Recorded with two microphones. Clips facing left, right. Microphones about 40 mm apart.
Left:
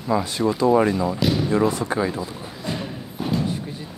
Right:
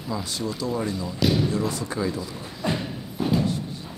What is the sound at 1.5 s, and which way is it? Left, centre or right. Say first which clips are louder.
Speech: left 6 dB; left.